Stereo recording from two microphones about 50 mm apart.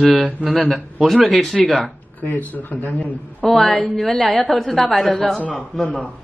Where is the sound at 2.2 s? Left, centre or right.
Left.